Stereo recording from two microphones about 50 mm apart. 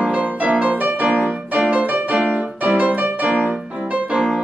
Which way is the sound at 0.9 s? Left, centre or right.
Centre.